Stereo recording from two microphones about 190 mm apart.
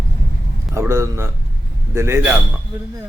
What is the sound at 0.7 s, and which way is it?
A man's voice, 15° right (ahead or behind).